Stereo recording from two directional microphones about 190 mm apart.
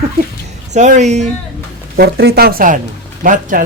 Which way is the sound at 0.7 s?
40° right (ahead or behind).